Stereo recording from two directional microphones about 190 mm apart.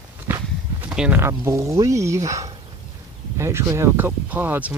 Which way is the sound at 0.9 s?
5° right (ahead or behind).